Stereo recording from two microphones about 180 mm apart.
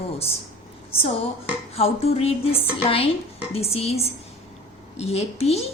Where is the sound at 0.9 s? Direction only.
30° left (ahead or behind).